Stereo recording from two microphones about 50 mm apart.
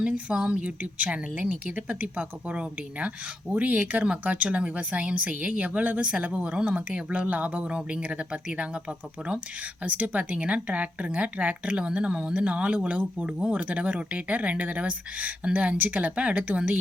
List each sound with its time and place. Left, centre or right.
0.0 s speech: centre